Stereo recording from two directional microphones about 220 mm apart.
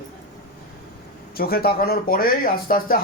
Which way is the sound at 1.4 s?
45° left (ahead or behind).